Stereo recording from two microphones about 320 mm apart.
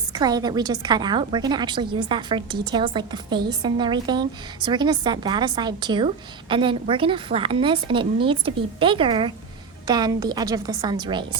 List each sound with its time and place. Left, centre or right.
0.1 s a woman's voice: centre